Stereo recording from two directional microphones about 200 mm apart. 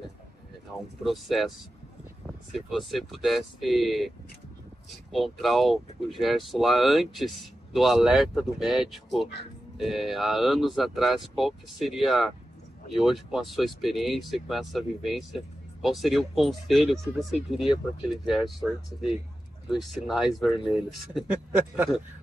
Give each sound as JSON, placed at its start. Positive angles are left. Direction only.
{"t": 1.0, "sound": "speech", "side_deg": 0}
{"t": 5.1, "sound": "speech", "side_deg": 0}
{"t": 19.7, "sound": "speech", "side_deg": 0}